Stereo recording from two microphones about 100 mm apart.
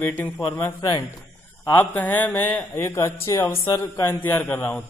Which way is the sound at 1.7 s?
20° left (ahead or behind).